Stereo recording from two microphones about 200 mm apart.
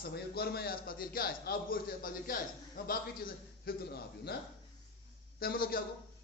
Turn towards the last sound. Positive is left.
turn(degrees=50)  # may be behind; listen again after turning